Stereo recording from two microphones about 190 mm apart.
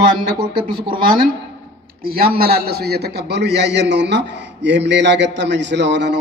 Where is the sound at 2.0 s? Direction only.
55° right (ahead or behind).